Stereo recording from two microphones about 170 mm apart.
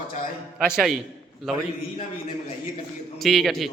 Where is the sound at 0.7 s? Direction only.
5° right (ahead or behind).